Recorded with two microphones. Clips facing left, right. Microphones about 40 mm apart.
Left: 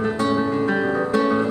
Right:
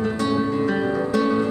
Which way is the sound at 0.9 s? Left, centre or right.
Left.